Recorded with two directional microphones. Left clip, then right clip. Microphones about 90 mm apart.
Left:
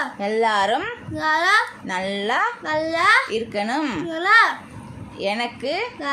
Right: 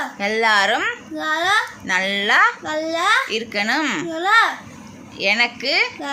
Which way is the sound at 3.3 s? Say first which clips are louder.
Right 3 dB; 30° left (ahead or behind).